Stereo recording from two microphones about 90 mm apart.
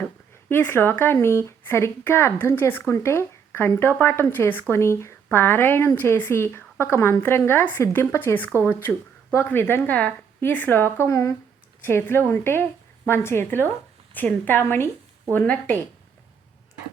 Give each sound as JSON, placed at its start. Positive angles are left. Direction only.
{"t": 0.0, "sound": "a woman's voice", "side_deg": 20}